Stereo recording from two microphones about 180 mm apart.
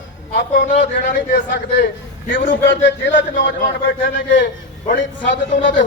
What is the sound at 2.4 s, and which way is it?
Speech, 85° left.